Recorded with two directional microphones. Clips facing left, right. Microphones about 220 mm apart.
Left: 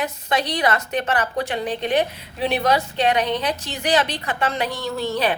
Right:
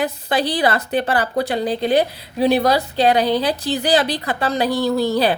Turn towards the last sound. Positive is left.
turn(degrees=-35)  # may be behind; listen again after turning